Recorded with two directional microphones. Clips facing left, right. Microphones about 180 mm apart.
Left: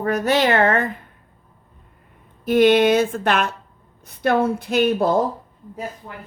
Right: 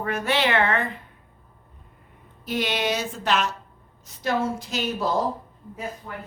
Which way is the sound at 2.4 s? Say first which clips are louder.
Left 12 dB; 50° left (ahead or behind).